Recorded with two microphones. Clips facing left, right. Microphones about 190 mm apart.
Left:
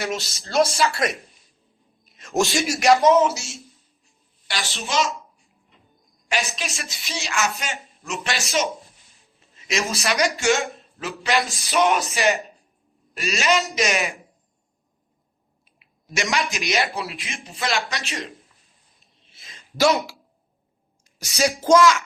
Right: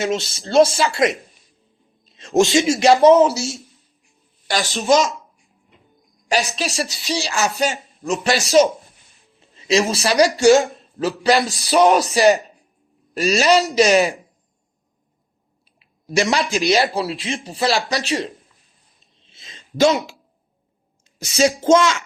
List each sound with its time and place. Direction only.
0.3 s a woman's voice: 30° right (ahead or behind)
2.0 s speech: 25° right (ahead or behind)
2.8 s a woman's voice: 30° right (ahead or behind)
4.4 s a woman's voice: 40° right (ahead or behind)
6.2 s a woman's voice: 35° right (ahead or behind)
15.8 s a sound: 35° right (ahead or behind)
16.3 s a woman's voice: 35° right (ahead or behind)
19.3 s a sound: 25° right (ahead or behind)